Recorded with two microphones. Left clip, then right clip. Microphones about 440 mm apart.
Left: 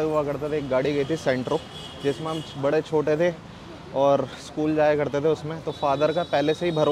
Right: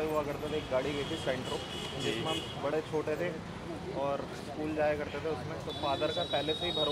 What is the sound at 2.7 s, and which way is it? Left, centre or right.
Speech, left.